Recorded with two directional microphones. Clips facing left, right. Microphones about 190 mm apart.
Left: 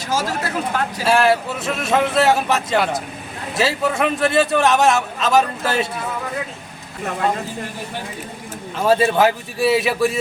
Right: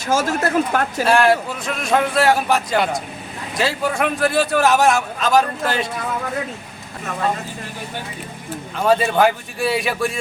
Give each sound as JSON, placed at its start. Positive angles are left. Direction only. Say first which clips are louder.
{"t": 0.1, "sound": "speech", "louder": "right 4 dB", "side_deg": -50}
{"t": 1.0, "sound": "a man's voice", "louder": "even", "side_deg": 5}
{"t": 8.8, "sound": "a man's voice", "louder": "even", "side_deg": 5}